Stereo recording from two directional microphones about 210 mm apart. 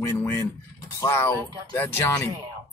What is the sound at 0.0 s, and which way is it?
Speech, 10° left (ahead or behind).